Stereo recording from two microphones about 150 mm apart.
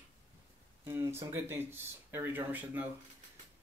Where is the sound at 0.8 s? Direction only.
20° right (ahead or behind).